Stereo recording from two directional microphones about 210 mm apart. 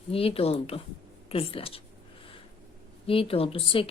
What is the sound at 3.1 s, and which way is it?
Speech, 25° left (ahead or behind).